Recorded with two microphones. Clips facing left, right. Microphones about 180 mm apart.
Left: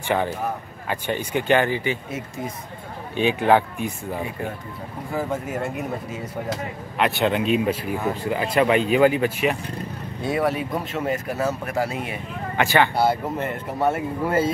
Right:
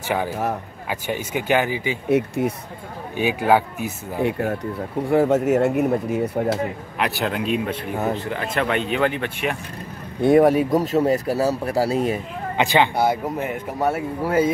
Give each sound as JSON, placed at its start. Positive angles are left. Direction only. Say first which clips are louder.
{"t": 0.8, "sound": "speech", "louder": "left 1 dB", "side_deg": -10}
{"t": 2.0, "sound": "speech", "louder": "right 11 dB", "side_deg": -65}
{"t": 3.2, "sound": "speech", "louder": "even", "side_deg": -10}
{"t": 4.2, "sound": "speech", "louder": "right 8 dB", "side_deg": -70}
{"t": 7.0, "sound": "speech", "louder": "left 3 dB", "side_deg": 0}
{"t": 10.2, "sound": "speech", "louder": "right 9 dB", "side_deg": -45}
{"t": 12.5, "sound": "speech", "louder": "right 1 dB", "side_deg": -15}